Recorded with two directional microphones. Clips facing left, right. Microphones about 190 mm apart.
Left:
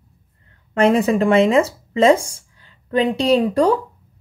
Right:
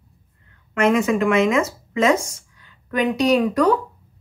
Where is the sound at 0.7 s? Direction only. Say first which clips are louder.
Left 3 dB; 35° left (ahead or behind).